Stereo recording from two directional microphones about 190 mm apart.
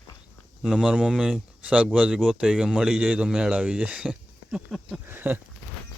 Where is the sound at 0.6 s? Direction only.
5° right (ahead or behind).